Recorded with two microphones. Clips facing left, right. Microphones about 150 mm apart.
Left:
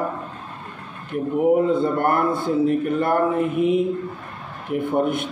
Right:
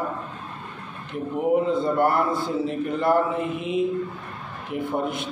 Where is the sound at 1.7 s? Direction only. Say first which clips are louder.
Left 2 dB; 55° left (ahead or behind).